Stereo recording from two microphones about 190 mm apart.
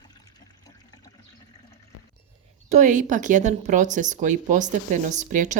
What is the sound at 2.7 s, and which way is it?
Speech, 40° right (ahead or behind).